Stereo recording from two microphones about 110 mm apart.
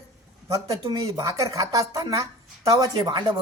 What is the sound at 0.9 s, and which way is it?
A woman's voice, 35° right (ahead or behind).